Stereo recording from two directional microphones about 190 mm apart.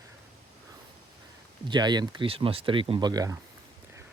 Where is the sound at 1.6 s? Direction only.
25° right (ahead or behind).